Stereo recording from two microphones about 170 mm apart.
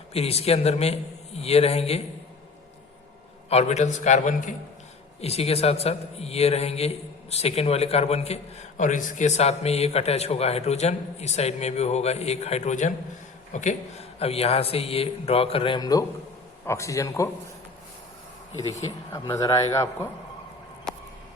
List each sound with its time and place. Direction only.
0.1 s a man's voice: 35° left (ahead or behind)
3.5 s a man's voice: 40° left (ahead or behind)
5.2 s a man's voice: 35° left (ahead or behind); by 17.2 s 20° left (ahead or behind)
18.7 s a man's voice: 20° left (ahead or behind)